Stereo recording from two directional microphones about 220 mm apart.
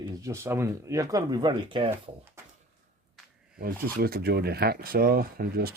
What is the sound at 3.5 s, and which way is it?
Speech, 45° right (ahead or behind).